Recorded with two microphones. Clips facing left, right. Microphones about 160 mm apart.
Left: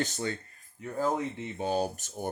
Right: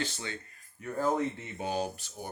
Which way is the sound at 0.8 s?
10° left (ahead or behind).